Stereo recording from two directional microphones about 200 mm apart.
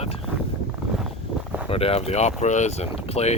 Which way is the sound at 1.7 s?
30° left (ahead or behind).